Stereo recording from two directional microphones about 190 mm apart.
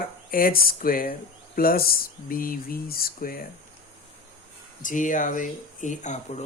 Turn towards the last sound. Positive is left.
turn(degrees=40)  # may be behind; listen again after turning